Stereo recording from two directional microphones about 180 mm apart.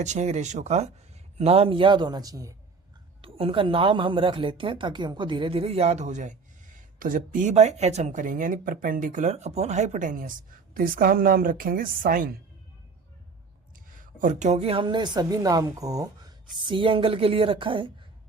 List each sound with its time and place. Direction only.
0.0 s a woman's voice: 40° right (ahead or behind); by 2.6 s 20° right (ahead or behind)
3.2 s a woman's voice: 30° right (ahead or behind); by 12.4 s 50° right (ahead or behind)
14.0 s a woman's voice: 45° right (ahead or behind); by 17.9 s 25° right (ahead or behind)